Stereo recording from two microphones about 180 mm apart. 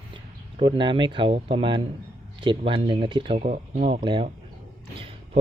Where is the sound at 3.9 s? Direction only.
25° right (ahead or behind).